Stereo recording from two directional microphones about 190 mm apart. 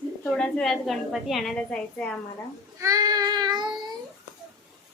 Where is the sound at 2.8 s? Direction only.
20° right (ahead or behind).